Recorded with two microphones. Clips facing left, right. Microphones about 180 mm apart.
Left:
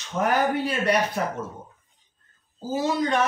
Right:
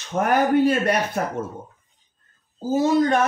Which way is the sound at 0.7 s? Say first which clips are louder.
Right 3 dB; 50° right (ahead or behind).